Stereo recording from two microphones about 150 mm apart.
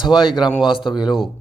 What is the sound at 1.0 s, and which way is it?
Speech, 5° right (ahead or behind).